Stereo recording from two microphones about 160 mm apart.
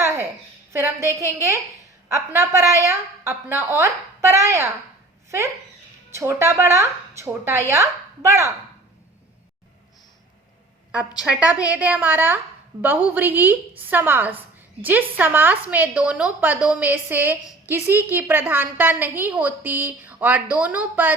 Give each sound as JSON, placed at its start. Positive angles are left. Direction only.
{"t": 0.7, "sound": "a woman's voice", "side_deg": -15}
{"t": 6.1, "sound": "a woman's voice", "side_deg": -15}
{"t": 11.2, "sound": "a woman's voice", "side_deg": -5}